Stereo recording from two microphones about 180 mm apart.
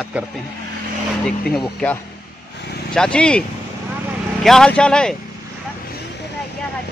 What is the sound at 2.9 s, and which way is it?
Speech, 5° left (ahead or behind).